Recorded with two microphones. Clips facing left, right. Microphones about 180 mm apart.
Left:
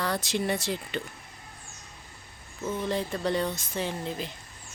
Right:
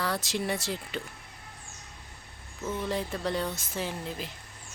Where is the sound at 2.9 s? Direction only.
Centre (ahead or behind).